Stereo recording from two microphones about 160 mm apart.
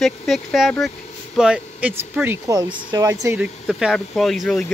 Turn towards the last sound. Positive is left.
turn(degrees=0)  # may be behind; listen again after turning